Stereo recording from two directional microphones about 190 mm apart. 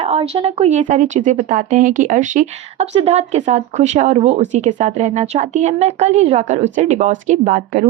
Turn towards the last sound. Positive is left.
turn(degrees=-45)  # may be behind; listen again after turning